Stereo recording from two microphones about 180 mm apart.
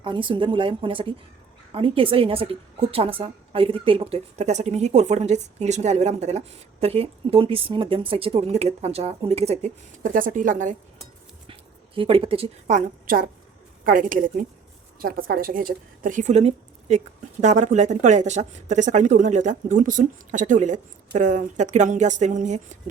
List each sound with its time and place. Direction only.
0.0 s a woman's voice: 30° right (ahead or behind); by 10.8 s 45° right (ahead or behind)
11.9 s a woman's voice: 30° right (ahead or behind)